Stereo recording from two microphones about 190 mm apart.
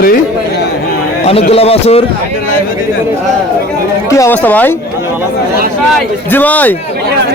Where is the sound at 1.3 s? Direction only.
30° left (ahead or behind).